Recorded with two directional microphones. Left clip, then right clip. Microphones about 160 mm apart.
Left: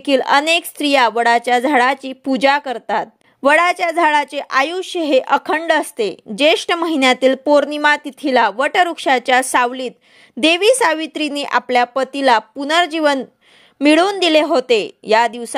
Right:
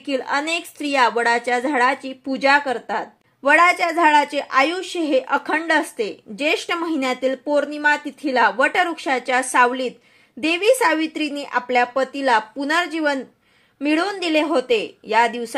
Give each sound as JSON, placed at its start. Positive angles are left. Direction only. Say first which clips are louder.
{"t": 0.0, "sound": "a woman's voice", "louder": "left 8 dB", "side_deg": 40}